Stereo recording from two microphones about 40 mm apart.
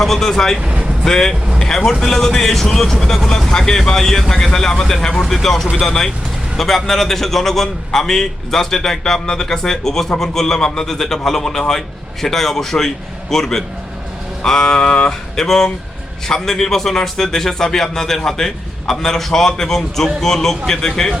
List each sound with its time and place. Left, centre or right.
0.0 s a man's voice: centre
0.6 s speech: right
1.0 s a man's voice: centre